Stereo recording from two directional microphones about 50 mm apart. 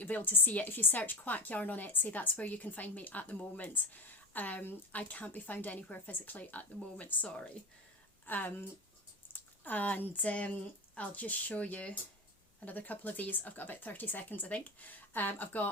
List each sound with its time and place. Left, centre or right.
0.0 s a woman's voice: left
8.3 s a woman's voice: left
9.6 s a woman's voice: left